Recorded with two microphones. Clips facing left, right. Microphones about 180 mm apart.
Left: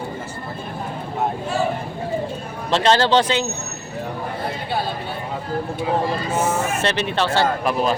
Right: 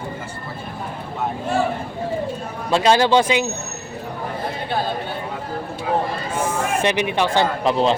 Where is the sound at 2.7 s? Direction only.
10° right (ahead or behind).